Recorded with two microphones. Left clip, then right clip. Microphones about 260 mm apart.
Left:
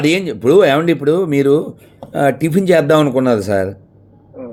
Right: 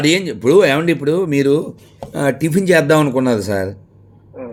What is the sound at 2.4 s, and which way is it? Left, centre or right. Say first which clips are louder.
A man's voice: left 1 dB; centre.